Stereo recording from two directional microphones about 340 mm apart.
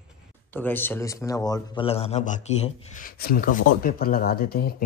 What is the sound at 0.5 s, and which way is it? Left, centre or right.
A man's voice, centre.